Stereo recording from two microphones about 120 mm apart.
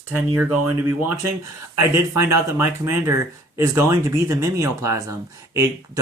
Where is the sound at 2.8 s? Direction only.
20° right (ahead or behind).